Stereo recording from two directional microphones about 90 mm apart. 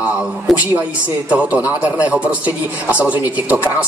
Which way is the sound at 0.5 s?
20° right (ahead or behind).